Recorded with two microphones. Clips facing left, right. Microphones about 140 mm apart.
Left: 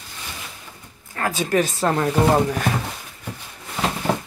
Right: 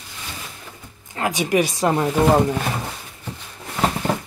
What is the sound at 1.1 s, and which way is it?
Speech, 15° right (ahead or behind).